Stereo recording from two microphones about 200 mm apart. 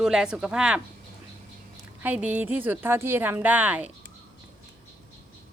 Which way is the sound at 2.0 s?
10° right (ahead or behind).